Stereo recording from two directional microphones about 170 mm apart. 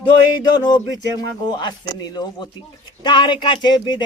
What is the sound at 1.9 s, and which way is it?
Speech, 25° left (ahead or behind).